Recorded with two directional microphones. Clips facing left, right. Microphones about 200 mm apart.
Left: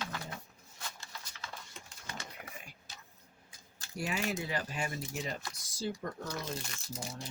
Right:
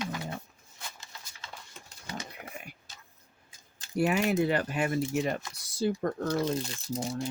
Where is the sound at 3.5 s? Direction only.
20° right (ahead or behind).